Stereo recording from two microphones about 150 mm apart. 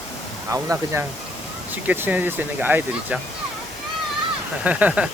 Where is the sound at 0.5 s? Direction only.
20° right (ahead or behind).